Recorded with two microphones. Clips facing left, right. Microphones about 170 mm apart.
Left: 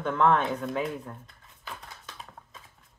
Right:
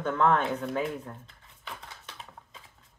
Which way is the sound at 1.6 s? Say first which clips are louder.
Left 1 dB; 20° right (ahead or behind).